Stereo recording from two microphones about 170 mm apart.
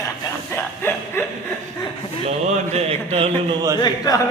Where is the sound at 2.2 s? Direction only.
40° right (ahead or behind).